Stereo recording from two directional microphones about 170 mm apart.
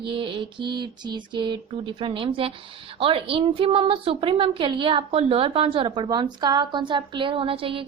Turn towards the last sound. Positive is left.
turn(degrees=-30)  # may be behind; listen again after turning